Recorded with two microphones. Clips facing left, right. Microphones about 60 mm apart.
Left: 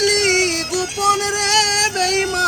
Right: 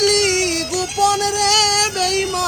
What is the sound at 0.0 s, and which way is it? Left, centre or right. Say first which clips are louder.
Music: even; left.